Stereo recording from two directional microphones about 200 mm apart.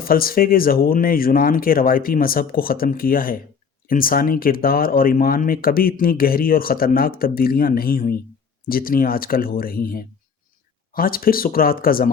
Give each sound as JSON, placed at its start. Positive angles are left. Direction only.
{"t": 0.0, "sound": "speech", "side_deg": 45}